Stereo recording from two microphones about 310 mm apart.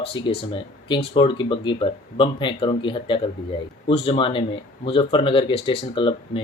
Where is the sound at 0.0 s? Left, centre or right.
Centre.